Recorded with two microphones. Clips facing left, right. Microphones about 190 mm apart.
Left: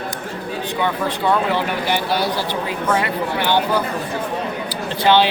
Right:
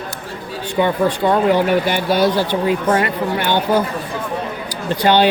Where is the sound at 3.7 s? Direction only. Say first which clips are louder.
Right 4 dB; 45° right (ahead or behind).